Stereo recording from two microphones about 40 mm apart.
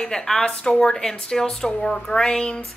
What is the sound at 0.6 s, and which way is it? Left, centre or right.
Speech, left.